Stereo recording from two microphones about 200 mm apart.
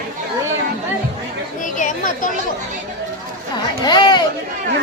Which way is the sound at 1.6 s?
40° left (ahead or behind).